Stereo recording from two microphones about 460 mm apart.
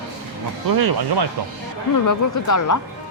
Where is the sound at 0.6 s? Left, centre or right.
Right.